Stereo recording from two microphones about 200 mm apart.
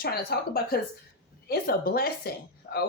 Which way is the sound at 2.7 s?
55° left (ahead or behind).